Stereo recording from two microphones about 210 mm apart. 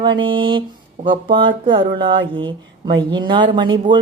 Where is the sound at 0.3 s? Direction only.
25° right (ahead or behind).